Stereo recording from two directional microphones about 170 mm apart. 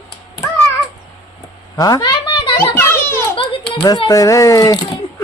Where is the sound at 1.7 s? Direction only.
20° left (ahead or behind).